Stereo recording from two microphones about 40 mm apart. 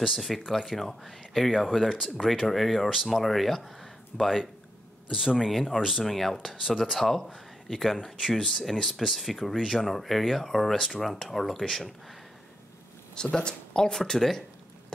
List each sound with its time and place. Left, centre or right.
0.0 s speech: centre
5.0 s speech: centre
5.5 s speech: centre
5.8 s speech: centre
6.0 s speech: centre
6.4 s speech: centre
13.1 s speech: left